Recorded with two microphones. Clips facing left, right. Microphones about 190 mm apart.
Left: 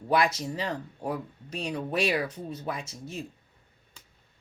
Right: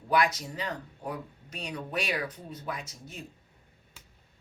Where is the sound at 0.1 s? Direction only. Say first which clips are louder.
Left 2 dB; 25° left (ahead or behind).